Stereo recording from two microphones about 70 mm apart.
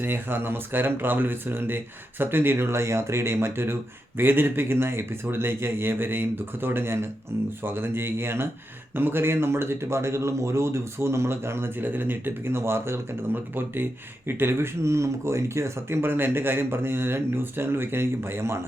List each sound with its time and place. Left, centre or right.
0.0 s a man's voice: right